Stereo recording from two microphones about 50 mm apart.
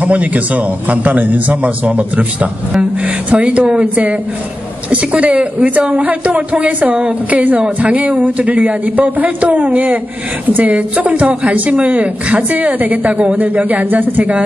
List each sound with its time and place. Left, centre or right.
0.0 s a woman's voice: right